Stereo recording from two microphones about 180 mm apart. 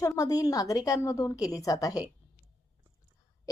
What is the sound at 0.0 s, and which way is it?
A woman's voice, 20° left (ahead or behind).